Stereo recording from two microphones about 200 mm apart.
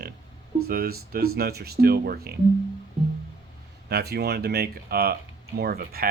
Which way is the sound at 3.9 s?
50° right (ahead or behind).